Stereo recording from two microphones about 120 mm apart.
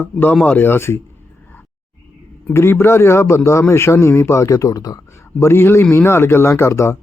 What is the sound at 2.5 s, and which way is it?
A man's voice, 20° left (ahead or behind).